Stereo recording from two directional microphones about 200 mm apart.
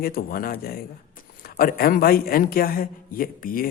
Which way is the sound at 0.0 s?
45° left (ahead or behind).